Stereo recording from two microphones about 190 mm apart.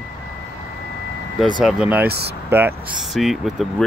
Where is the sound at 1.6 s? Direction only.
5° right (ahead or behind).